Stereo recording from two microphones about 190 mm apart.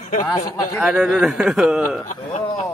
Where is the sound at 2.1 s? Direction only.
40° left (ahead or behind).